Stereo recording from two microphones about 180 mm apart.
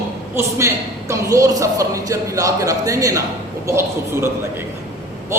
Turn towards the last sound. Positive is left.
turn(degrees=-15)  # may be behind; listen again after turning